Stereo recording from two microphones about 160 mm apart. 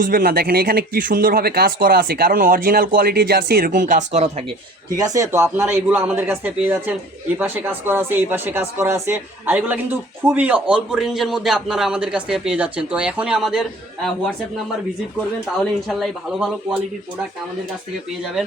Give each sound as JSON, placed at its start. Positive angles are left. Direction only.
{"t": 0.0, "sound": "speech", "side_deg": -60}
{"t": 4.9, "sound": "speech", "side_deg": -20}
{"t": 15.9, "sound": "speech", "side_deg": 0}